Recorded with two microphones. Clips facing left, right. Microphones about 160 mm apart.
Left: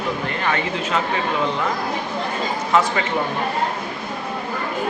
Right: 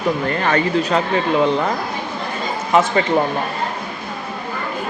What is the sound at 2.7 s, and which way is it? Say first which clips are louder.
Speech: right 3 dB; 15° right (ahead or behind).